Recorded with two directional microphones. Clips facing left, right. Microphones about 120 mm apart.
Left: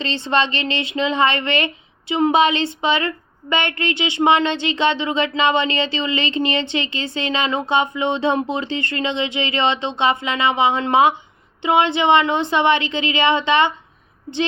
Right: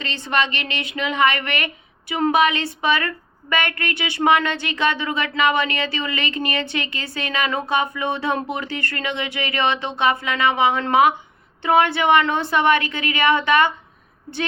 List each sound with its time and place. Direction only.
0.0 s speech: 25° left (ahead or behind)